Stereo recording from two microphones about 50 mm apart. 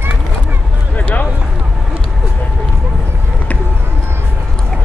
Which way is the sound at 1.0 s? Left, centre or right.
Left.